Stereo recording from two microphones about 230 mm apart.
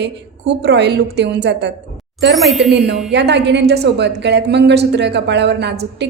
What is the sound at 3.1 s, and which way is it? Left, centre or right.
A woman's voice, right.